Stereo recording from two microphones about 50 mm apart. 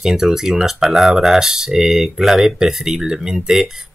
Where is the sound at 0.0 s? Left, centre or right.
Centre.